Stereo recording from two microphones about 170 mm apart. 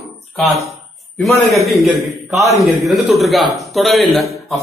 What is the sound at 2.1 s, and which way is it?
Speech, 20° right (ahead or behind).